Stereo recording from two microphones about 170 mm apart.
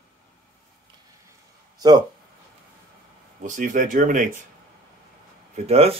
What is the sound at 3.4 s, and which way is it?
Speech, 50° right (ahead or behind).